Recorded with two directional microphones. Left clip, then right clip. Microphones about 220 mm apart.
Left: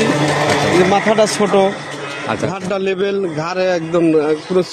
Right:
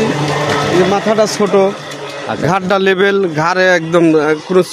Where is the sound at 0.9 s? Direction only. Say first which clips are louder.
Right 1 dB; 30° right (ahead or behind).